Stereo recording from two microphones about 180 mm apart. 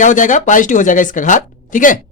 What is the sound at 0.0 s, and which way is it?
Speech, 45° left (ahead or behind).